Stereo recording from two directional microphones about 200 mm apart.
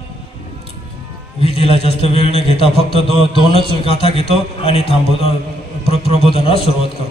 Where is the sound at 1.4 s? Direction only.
30° left (ahead or behind).